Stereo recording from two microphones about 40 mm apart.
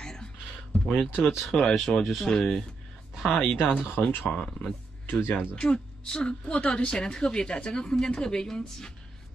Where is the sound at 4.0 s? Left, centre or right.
Centre.